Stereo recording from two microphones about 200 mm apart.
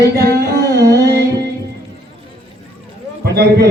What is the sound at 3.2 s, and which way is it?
Speech, 50° right (ahead or behind).